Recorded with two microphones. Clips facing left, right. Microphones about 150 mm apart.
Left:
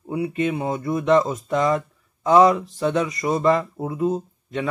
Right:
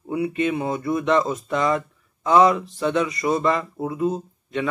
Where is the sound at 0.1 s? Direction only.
35° left (ahead or behind).